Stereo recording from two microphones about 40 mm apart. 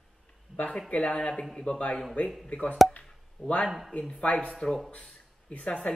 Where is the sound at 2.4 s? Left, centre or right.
Left.